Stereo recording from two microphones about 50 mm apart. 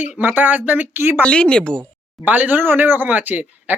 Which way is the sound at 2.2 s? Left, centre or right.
Right.